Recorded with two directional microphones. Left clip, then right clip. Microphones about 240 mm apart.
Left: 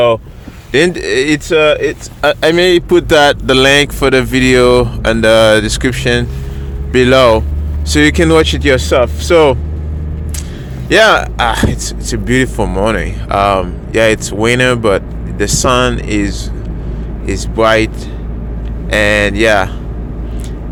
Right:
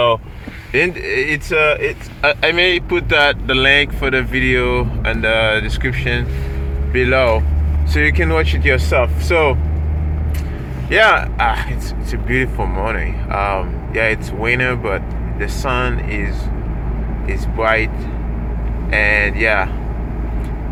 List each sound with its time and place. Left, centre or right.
0.7 s speech: left
10.9 s speech: left
18.9 s speech: left